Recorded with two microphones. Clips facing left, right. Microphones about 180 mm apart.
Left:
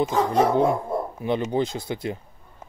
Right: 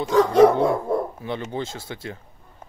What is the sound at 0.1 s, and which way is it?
Dog, 75° right (ahead or behind).